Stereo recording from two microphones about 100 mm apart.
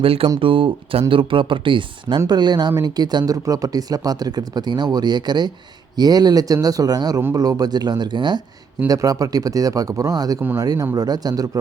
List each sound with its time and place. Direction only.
0.0 s speech: 65° right (ahead or behind); by 8.4 s 50° right (ahead or behind)
8.9 s speech: 35° right (ahead or behind)